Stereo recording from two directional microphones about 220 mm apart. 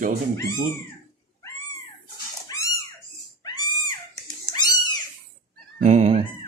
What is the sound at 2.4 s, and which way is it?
Dog, 15° left (ahead or behind).